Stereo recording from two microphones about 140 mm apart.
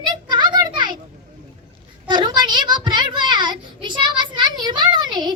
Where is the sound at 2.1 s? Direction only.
35° right (ahead or behind).